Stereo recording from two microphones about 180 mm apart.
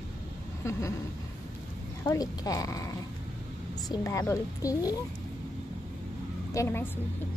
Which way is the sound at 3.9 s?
15° left (ahead or behind).